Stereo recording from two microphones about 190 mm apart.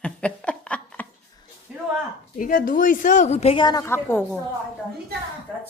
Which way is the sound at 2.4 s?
50° left (ahead or behind).